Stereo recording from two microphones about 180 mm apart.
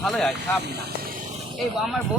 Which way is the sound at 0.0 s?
Centre (ahead or behind).